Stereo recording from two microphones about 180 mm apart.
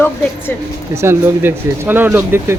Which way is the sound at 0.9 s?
15° right (ahead or behind).